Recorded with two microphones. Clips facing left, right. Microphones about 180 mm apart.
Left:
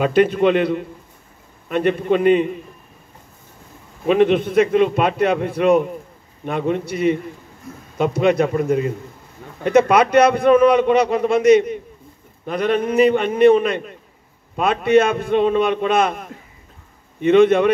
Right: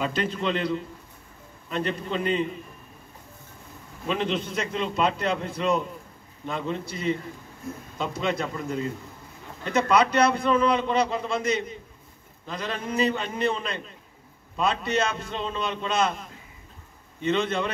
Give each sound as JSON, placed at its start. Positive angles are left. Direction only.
{"t": 0.0, "sound": "a man's voice", "side_deg": 60}
{"t": 4.1, "sound": "a man's voice", "side_deg": 60}